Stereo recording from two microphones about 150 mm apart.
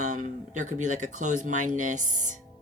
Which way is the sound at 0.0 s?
55° right (ahead or behind).